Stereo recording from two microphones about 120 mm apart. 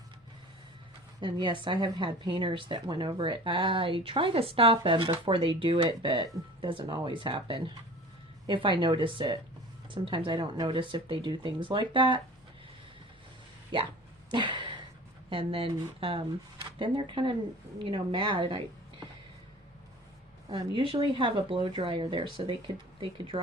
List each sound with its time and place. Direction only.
1.2 s speech: 40° right (ahead or behind)
13.7 s speech: 45° right (ahead or behind)
14.3 s a sound: 40° right (ahead or behind)
15.3 s speech: 45° right (ahead or behind)
20.7 s speech: 45° right (ahead or behind)